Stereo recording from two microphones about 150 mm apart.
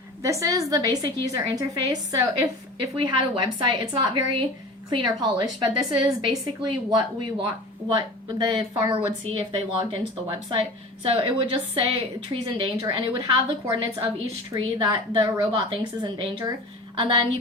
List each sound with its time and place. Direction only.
0.2 s a woman's voice: 20° right (ahead or behind)